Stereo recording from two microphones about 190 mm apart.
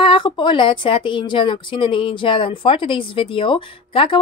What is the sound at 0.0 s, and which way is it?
A woman's voice, 25° left (ahead or behind).